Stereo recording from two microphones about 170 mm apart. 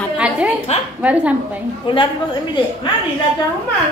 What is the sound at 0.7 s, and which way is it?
Speech, 40° left (ahead or behind).